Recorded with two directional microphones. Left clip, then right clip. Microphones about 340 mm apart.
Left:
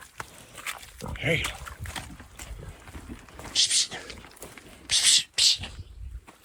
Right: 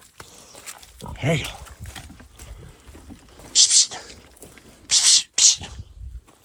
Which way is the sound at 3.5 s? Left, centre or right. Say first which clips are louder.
Right 7 dB; right.